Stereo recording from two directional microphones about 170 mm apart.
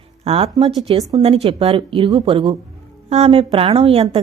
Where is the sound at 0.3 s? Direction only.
35° right (ahead or behind).